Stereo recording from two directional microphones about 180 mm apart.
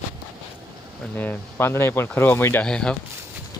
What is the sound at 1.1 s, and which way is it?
Speech, 10° left (ahead or behind).